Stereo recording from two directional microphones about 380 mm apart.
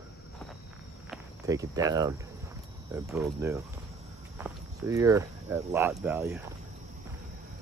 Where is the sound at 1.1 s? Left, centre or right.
Centre.